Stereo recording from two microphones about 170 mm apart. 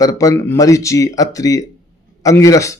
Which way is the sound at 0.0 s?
20° left (ahead or behind).